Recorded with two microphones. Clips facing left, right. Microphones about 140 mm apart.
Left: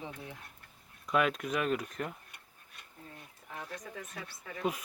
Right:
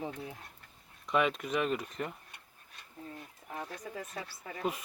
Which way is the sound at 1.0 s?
Centre (ahead or behind).